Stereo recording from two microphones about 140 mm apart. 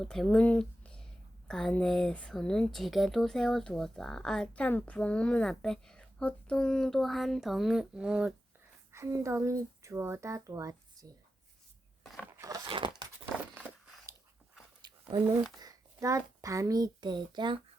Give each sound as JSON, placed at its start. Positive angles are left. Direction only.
{"t": 0.0, "sound": "speech", "side_deg": 5}
{"t": 8.9, "sound": "speech", "side_deg": -20}
{"t": 12.4, "sound": "a sound", "side_deg": -25}
{"t": 12.6, "sound": "tearing", "side_deg": -35}
{"t": 15.1, "sound": "speech", "side_deg": -30}